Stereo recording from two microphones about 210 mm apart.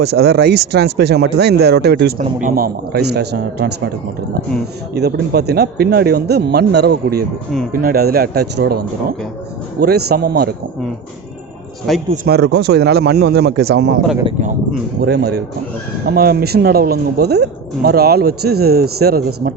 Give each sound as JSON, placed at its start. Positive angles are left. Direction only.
{"t": 0.0, "sound": "speech", "side_deg": -50}
{"t": 4.9, "sound": "speech", "side_deg": -50}
{"t": 12.1, "sound": "speech", "side_deg": -45}
{"t": 15.0, "sound": "speech", "side_deg": -50}